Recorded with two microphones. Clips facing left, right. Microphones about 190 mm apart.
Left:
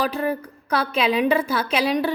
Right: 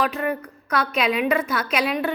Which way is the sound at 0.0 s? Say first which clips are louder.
Left 1 dB; 35° left (ahead or behind).